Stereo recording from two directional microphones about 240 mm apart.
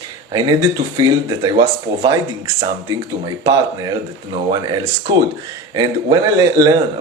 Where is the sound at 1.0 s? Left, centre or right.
Centre.